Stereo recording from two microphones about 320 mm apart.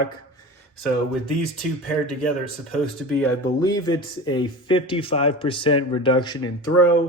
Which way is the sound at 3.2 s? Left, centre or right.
Centre.